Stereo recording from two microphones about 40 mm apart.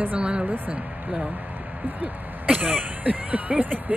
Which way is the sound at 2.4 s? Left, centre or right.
Right.